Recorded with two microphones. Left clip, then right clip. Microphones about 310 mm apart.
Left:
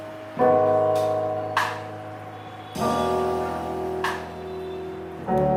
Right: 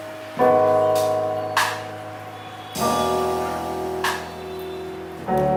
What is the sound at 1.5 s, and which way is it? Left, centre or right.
Music, centre.